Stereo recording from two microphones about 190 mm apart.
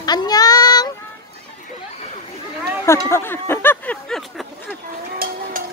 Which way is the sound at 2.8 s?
15° left (ahead or behind).